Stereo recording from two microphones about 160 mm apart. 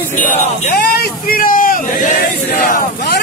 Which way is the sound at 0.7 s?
75° left (ahead or behind).